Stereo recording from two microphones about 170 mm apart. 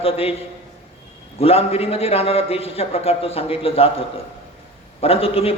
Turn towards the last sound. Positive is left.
turn(degrees=35)  # may be behind; listen again after turning